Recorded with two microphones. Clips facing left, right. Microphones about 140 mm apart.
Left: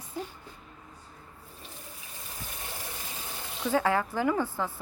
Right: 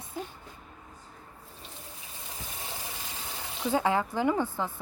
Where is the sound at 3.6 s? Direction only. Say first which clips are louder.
Even; 20° right (ahead or behind).